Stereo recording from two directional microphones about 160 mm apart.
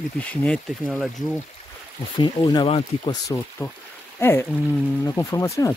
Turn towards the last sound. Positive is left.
turn(degrees=20)  # may be behind; listen again after turning